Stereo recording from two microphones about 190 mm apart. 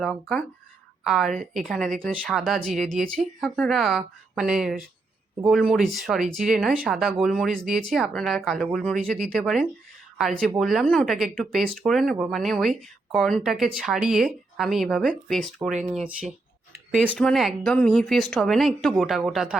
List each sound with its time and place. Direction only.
0.0 s speech: 5° left (ahead or behind)
1.3 s a woman's voice: 45° right (ahead or behind)
1.6 s speech: centre (ahead or behind)